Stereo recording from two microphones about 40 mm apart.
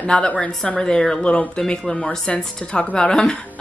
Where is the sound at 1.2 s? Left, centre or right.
Left.